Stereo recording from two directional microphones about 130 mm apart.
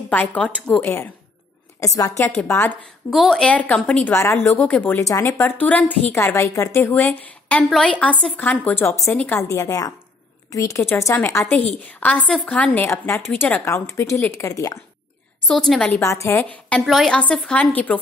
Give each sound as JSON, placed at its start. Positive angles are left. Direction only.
{"t": 0.1, "sound": "a woman's voice", "side_deg": 15}
{"t": 3.1, "sound": "a woman's voice", "side_deg": 0}
{"t": 9.4, "sound": "a woman's voice", "side_deg": 25}
{"t": 15.4, "sound": "a woman's voice", "side_deg": 5}
{"t": 16.0, "sound": "a woman's voice", "side_deg": 25}